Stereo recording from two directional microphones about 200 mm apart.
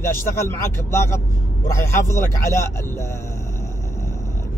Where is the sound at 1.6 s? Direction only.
15° left (ahead or behind).